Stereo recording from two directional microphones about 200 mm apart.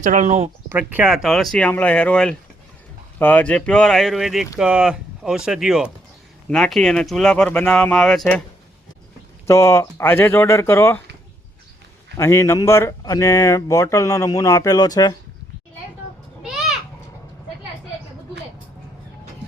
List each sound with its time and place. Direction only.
0.0 s speech: 40° right (ahead or behind)
0.7 s speech: 10° right (ahead or behind)
9.5 s speech: 15° left (ahead or behind)
12.1 s speech: 15° left (ahead or behind)
16.4 s a sound: centre (ahead or behind)